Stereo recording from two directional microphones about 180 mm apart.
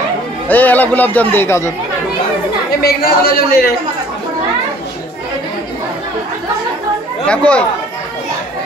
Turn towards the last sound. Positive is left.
turn(degrees=5)  # may be behind; listen again after turning